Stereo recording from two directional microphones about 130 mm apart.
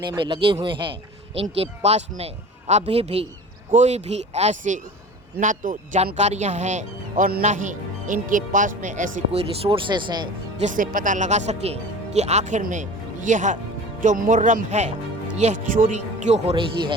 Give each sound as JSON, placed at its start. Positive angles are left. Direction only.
{"t": 0.3, "sound": "a man's voice", "side_deg": -40}
{"t": 3.7, "sound": "speech", "side_deg": -65}
{"t": 5.4, "sound": "speech", "side_deg": -80}
{"t": 9.6, "sound": "speech", "side_deg": -40}
{"t": 10.6, "sound": "speech", "side_deg": -80}
{"t": 15.4, "sound": "speech", "side_deg": -75}